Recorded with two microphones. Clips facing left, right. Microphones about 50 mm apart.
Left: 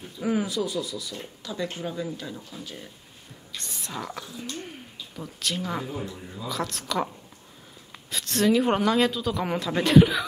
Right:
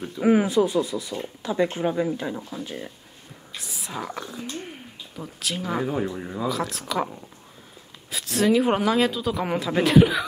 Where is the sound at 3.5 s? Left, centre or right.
Centre.